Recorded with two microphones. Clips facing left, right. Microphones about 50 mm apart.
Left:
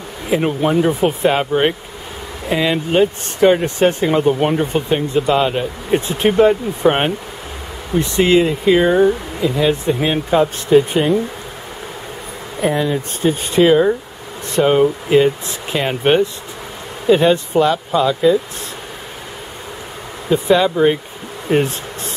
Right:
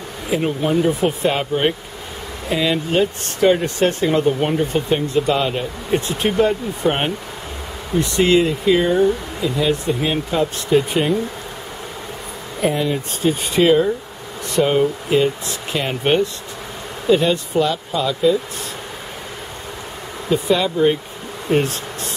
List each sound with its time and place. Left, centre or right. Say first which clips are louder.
0.3 s speech: left 3 dB; centre
12.6 s speech: left 2 dB; left
20.4 s speech: left 4 dB; centre